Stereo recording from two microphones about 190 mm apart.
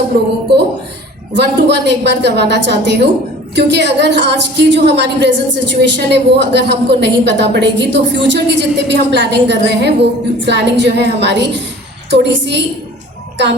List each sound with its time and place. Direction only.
1.4 s a woman's voice: 65° right (ahead or behind)